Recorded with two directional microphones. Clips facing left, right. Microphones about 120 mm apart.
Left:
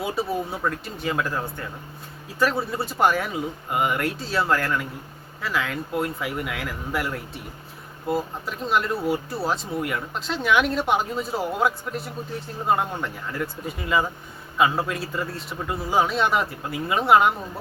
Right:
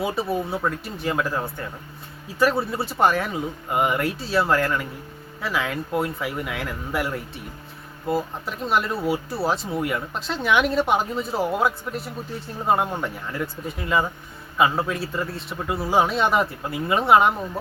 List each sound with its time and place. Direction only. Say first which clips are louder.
0.0 s speech: right 2 dB; centre (ahead or behind)